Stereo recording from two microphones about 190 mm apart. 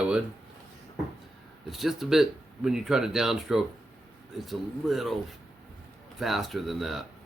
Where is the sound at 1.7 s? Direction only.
Centre (ahead or behind).